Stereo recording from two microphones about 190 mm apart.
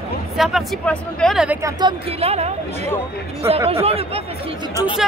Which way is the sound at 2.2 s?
35° right (ahead or behind).